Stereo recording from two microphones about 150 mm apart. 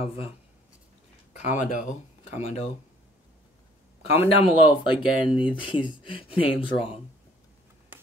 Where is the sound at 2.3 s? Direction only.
45° left (ahead or behind).